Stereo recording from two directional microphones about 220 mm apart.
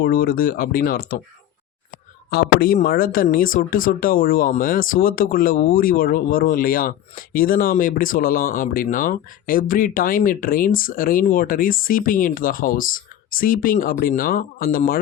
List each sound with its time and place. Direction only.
0.0 s speech: 45° left (ahead or behind)
2.3 s speech: 45° left (ahead or behind)